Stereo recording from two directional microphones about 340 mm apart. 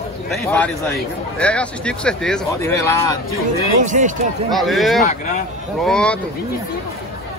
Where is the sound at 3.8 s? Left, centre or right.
Right.